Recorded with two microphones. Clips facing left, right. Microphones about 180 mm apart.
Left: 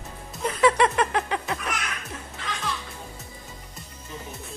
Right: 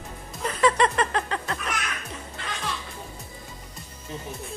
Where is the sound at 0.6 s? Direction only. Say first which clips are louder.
Left 1 dB; 10° left (ahead or behind).